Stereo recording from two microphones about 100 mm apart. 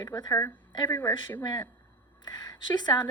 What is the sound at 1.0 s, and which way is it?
Speech, 50° left (ahead or behind).